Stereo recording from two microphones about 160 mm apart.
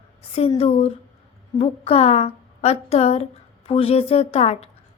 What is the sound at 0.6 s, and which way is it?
A woman's voice, 40° left (ahead or behind).